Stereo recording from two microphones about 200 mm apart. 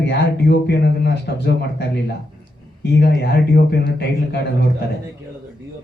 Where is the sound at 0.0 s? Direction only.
55° left (ahead or behind).